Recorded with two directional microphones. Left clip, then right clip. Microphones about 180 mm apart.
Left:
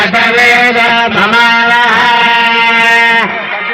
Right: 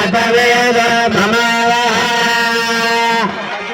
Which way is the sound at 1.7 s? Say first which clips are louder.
Left 6 dB; 50° right (ahead or behind).